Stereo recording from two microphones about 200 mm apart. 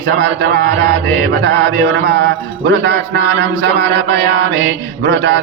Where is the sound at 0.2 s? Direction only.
60° right (ahead or behind).